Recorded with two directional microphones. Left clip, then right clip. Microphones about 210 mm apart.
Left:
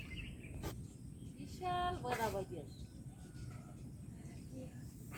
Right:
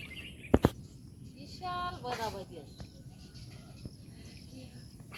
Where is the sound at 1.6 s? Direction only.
35° left (ahead or behind).